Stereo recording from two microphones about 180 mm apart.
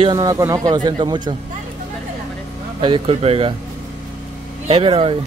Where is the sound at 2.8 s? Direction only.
30° right (ahead or behind).